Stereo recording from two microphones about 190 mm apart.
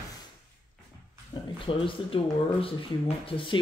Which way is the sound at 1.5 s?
25° left (ahead or behind).